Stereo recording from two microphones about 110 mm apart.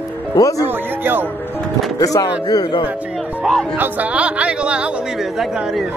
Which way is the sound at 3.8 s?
15° right (ahead or behind).